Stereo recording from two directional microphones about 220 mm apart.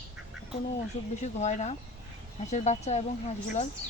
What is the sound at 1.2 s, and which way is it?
Speech, 30° left (ahead or behind).